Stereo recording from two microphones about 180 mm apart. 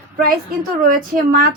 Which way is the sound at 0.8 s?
50° right (ahead or behind).